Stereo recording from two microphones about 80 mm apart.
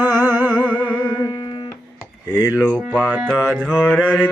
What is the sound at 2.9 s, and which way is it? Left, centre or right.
Music, centre.